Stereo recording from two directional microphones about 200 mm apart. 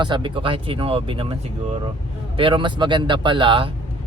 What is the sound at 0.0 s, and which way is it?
Speech, 25° right (ahead or behind).